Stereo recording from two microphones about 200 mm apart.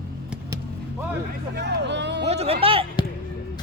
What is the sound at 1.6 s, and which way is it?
Speech, 60° right (ahead or behind).